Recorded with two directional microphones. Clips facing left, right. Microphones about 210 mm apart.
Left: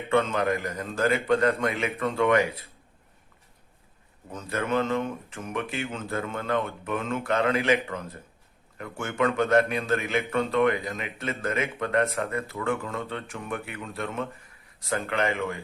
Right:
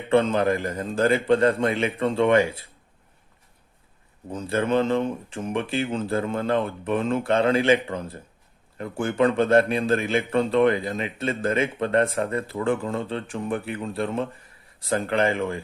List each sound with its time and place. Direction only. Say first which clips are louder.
0.1 s a man's voice: right 4 dB; 30° right (ahead or behind)
4.3 s speech: right 5 dB; 30° right (ahead or behind)